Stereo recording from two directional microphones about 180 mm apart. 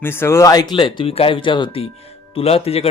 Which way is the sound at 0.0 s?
15° left (ahead or behind).